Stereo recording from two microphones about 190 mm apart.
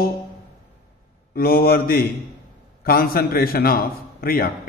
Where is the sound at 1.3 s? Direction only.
55° left (ahead or behind).